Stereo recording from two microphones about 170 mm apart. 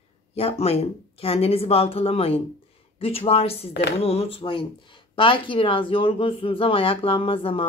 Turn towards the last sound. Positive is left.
turn(degrees=35)  # may be behind; listen again after turning